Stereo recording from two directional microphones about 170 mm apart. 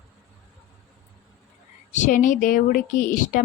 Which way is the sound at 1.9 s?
45° left (ahead or behind).